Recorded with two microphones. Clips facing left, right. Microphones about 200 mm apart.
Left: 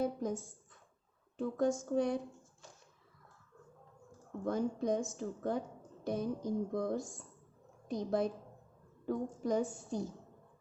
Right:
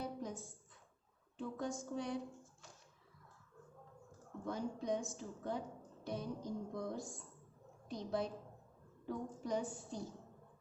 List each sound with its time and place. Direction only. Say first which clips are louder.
0.0 s a sound: left 9 dB; 45° left (ahead or behind)
1.4 s a woman's voice: left 9 dB; 45° left (ahead or behind)
4.4 s a woman's voice: left 7 dB; 45° left (ahead or behind)